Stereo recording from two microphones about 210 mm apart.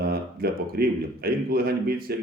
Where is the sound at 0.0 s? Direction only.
45° right (ahead or behind).